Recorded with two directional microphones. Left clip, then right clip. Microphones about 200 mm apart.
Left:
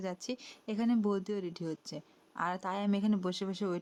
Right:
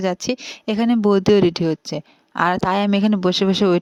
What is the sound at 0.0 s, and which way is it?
Speech, 40° right (ahead or behind).